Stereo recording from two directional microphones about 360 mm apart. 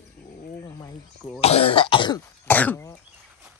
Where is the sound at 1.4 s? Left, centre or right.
Centre.